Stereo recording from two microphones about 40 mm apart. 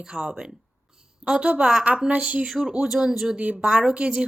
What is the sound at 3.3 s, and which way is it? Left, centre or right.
Speech, right.